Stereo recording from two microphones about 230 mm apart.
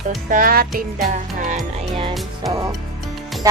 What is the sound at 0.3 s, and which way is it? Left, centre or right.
Music, right.